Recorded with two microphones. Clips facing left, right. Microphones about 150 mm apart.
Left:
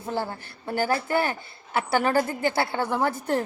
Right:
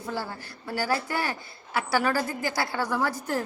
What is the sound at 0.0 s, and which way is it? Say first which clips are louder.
Speech: left 3 dB; 25° left (ahead or behind).